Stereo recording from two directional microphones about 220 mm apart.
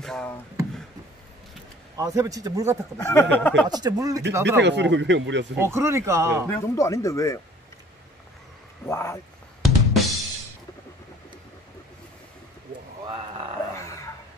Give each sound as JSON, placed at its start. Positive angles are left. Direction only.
{"t": 0.0, "sound": "a sound", "side_deg": 5}
{"t": 2.0, "sound": "speech", "side_deg": -15}
{"t": 3.0, "sound": "speech", "side_deg": 10}
{"t": 3.6, "sound": "speech", "side_deg": -15}
{"t": 4.6, "sound": "speech", "side_deg": -55}
{"t": 5.6, "sound": "speech", "side_deg": -10}
{"t": 6.5, "sound": "speech", "side_deg": 10}
{"t": 8.8, "sound": "speech", "side_deg": 10}
{"t": 9.6, "sound": "drum kit", "side_deg": 0}
{"t": 13.0, "sound": "a sound", "side_deg": -20}